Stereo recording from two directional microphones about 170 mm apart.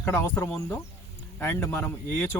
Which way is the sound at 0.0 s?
15° left (ahead or behind).